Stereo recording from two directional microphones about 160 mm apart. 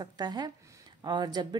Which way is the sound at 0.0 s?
25° right (ahead or behind).